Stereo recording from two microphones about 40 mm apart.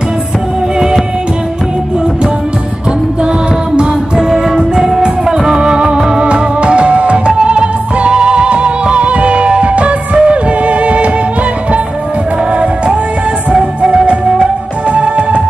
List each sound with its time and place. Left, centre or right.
3.7 s music: centre
13.5 s music: centre